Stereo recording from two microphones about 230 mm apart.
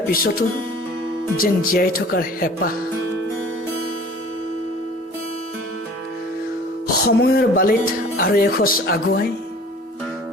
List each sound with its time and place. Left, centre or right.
0.1 s speech: left
6.8 s music: left
8.2 s speech: left